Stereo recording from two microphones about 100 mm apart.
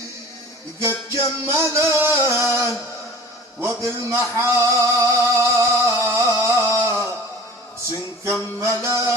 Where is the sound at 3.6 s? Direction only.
30° right (ahead or behind).